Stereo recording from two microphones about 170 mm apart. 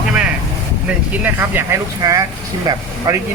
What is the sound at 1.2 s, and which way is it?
Speech, 15° right (ahead or behind).